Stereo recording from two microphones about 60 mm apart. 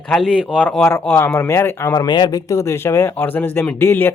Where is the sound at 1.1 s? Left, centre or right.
Left.